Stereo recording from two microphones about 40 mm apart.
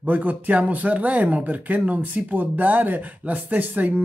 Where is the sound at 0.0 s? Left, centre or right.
Right.